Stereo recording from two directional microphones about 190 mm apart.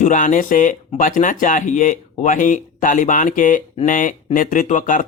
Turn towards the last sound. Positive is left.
turn(degrees=45)  # may be behind; listen again after turning